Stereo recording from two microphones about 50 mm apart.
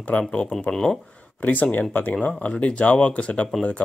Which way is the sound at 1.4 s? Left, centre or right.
Left.